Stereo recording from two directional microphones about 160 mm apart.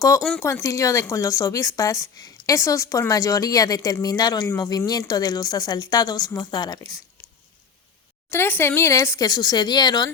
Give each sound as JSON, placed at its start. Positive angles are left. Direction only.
{"t": 0.2, "sound": "speech", "side_deg": -5}
{"t": 0.4, "sound": "speech", "side_deg": 20}
{"t": 8.3, "sound": "speech", "side_deg": 15}